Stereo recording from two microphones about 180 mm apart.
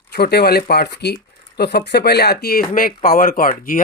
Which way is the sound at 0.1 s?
65° left (ahead or behind).